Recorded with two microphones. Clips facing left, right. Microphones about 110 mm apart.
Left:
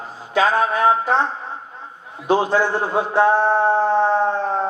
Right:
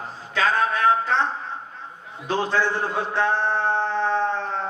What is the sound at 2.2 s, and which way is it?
A man's voice, 15° left (ahead or behind).